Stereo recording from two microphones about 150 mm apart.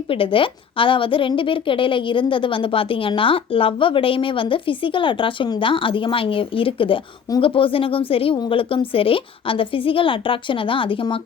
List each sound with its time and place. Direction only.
0.1 s a woman's voice: 35° left (ahead or behind)